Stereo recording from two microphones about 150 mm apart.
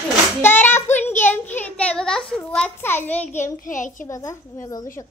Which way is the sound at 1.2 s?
15° left (ahead or behind).